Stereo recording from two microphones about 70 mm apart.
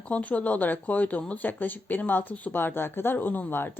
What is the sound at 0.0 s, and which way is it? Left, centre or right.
A woman's voice, left.